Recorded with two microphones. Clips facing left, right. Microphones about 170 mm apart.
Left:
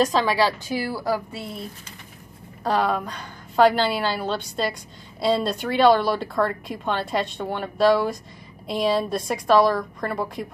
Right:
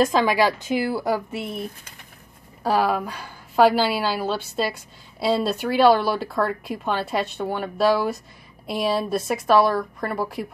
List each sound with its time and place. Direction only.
0.0 s a woman's voice: 10° right (ahead or behind)
2.6 s a woman's voice: 5° right (ahead or behind)